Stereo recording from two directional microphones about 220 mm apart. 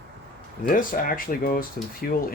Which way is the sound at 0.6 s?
40° left (ahead or behind).